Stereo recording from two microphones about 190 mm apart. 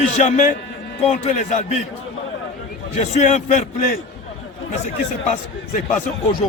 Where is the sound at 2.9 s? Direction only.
40° left (ahead or behind).